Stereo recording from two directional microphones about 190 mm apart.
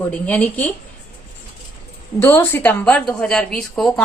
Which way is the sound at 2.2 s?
10° left (ahead or behind).